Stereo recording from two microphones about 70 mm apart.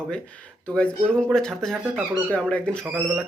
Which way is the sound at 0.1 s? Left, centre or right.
Centre.